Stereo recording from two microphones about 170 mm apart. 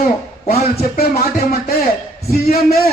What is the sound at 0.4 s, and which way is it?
Speech, 65° left (ahead or behind).